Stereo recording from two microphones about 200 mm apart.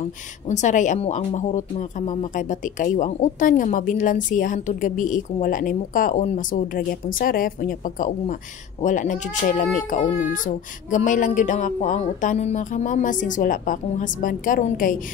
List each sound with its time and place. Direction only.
0.5 s speech: 35° left (ahead or behind)